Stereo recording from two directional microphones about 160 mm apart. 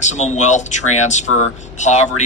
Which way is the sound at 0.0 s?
45° left (ahead or behind).